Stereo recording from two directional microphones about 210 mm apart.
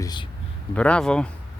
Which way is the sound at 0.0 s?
20° left (ahead or behind).